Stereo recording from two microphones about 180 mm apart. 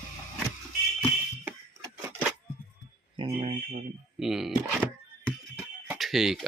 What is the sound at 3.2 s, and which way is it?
Speech, 30° right (ahead or behind).